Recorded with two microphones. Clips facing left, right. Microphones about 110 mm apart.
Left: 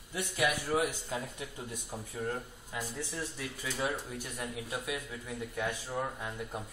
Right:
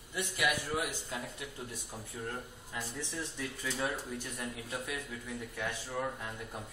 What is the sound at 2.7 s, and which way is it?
A man's voice, 10° left (ahead or behind).